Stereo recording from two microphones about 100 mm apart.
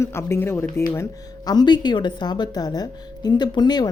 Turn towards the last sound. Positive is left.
turn(degrees=45)  # may be behind; listen again after turning